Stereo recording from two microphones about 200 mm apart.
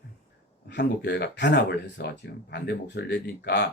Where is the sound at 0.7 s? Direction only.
60° left (ahead or behind).